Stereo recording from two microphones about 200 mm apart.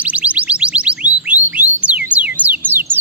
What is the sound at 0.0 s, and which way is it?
Music, 5° right (ahead or behind).